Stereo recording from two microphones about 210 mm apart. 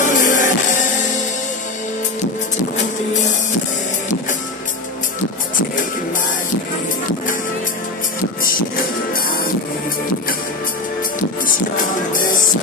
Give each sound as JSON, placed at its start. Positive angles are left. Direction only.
{"t": 0.0, "sound": "music", "side_deg": 40}
{"t": 9.1, "sound": "music", "side_deg": 45}
{"t": 11.1, "sound": "music", "side_deg": 40}